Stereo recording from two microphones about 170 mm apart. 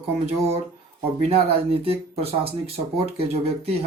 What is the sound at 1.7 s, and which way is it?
Speech, 35° right (ahead or behind).